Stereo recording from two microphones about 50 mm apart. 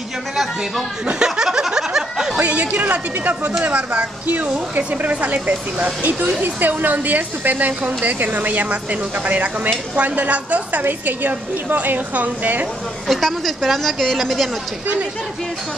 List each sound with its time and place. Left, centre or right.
0.4 s a woman's voice: centre
1.2 s snicker: centre
2.3 s speech: right
4.7 s speech: right
13.0 s a woman's voice: centre